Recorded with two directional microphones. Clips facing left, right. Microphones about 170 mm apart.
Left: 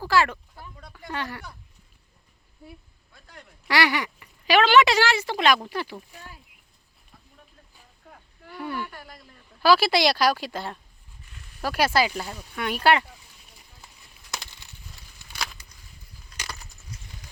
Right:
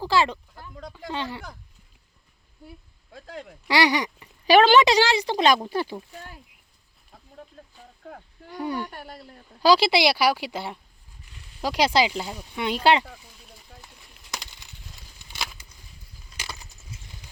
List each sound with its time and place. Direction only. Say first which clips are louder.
0.0 s speech: even; 20° right (ahead or behind)
3.1 s speech: right 11 dB; 90° right
3.7 s speech: right 2 dB; 15° right (ahead or behind)
8.4 s speech: right 3 dB; 20° right (ahead or behind)
8.9 s speech: right 4 dB; 60° right (ahead or behind)
9.6 s speech: right 1 dB; 20° right (ahead or behind)